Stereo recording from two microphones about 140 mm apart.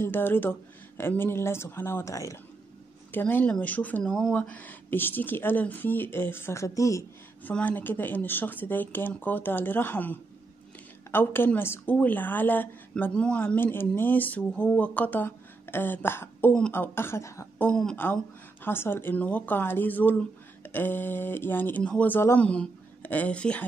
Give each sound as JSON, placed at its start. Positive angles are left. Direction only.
{"t": 0.0, "sound": "a woman's voice", "side_deg": 15}
{"t": 17.6, "sound": "a woman's voice", "side_deg": 5}